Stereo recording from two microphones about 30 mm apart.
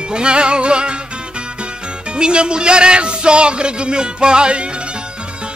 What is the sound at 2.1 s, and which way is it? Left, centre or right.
Speech, right.